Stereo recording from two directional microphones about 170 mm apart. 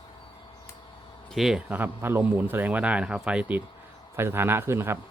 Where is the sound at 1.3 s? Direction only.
5° right (ahead or behind).